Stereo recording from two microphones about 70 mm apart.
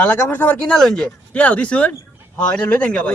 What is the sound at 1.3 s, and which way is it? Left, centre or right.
Speech, left.